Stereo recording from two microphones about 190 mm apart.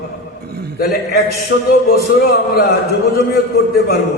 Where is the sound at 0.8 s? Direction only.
55° left (ahead or behind).